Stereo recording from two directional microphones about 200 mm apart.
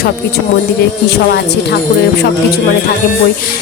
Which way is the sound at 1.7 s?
50° left (ahead or behind).